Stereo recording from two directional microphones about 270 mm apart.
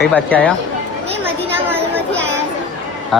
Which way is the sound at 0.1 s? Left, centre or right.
Centre.